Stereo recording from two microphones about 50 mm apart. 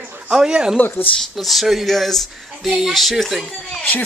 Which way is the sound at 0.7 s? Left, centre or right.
Left.